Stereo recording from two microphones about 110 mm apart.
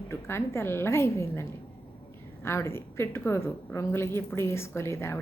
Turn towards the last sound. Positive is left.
turn(degrees=25)  # may be behind; listen again after turning